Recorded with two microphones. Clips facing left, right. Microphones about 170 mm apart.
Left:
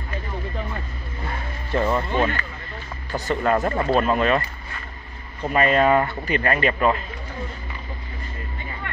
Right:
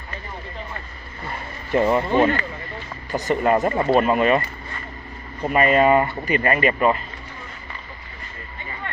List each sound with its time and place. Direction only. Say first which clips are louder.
1.7 s speech: right 4 dB; 15° right (ahead or behind)